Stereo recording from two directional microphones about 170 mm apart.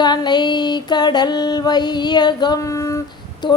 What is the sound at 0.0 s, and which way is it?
Music, 25° left (ahead or behind).